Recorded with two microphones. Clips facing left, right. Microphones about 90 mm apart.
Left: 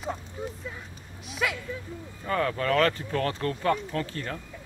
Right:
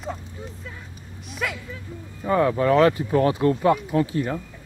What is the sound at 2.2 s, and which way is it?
Speech, 15° right (ahead or behind).